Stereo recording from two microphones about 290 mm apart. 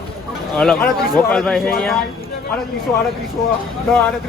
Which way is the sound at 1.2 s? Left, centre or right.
Centre.